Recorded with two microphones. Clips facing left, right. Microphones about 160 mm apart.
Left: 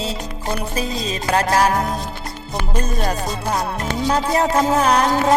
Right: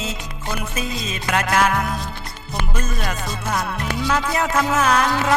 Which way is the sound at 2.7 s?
35° left (ahead or behind).